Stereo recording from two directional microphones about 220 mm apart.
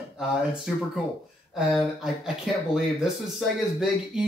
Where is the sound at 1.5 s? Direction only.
Centre (ahead or behind).